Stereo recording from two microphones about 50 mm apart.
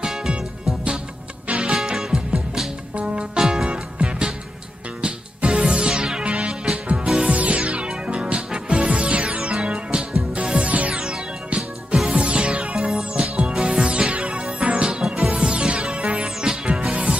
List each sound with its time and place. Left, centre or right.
0.0 s music: centre
1.5 s music: right
1.7 s music: centre
10.7 s music: right